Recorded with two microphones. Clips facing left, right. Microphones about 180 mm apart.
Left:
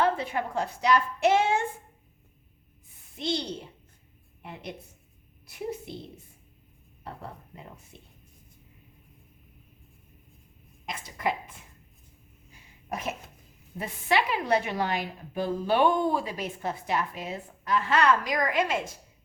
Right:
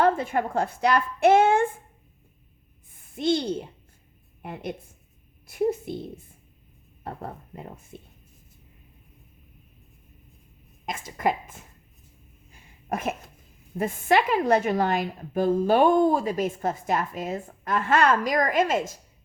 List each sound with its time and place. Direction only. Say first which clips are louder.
0.0 s a woman's voice: right 4 dB; 50° right (ahead or behind)
3.2 s a woman's voice: right 7 dB; 50° right (ahead or behind)
4.4 s a woman's voice: right 6 dB; 50° right (ahead or behind)
7.0 s a woman's voice: right 5 dB; 50° right (ahead or behind)
10.8 s a woman's voice: right 4 dB; 50° right (ahead or behind)
12.9 s cough: right 5 dB; 50° right (ahead or behind)
13.7 s a woman's voice: right 5 dB; 45° right (ahead or behind)